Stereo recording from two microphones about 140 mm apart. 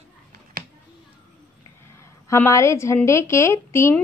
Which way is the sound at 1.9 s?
20° left (ahead or behind).